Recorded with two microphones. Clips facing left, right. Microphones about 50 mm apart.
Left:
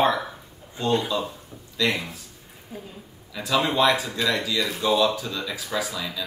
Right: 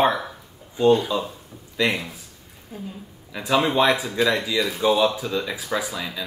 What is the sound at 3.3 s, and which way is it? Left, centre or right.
Speech, centre.